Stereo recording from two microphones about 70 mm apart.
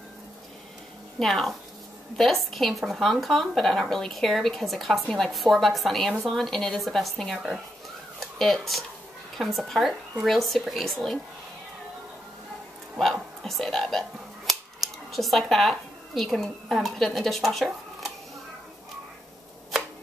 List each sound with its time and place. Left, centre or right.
1.2 s speech: centre
13.0 s speech: centre